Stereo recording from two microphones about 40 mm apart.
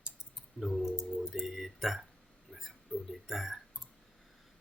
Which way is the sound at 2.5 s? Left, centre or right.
Centre.